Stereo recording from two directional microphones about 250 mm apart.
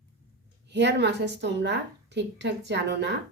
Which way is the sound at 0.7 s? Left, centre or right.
Right.